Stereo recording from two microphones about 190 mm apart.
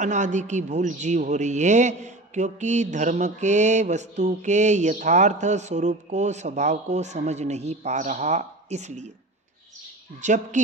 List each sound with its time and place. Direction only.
0.0 s a man's voice: 40° right (ahead or behind)
10.2 s a man's voice: 40° right (ahead or behind)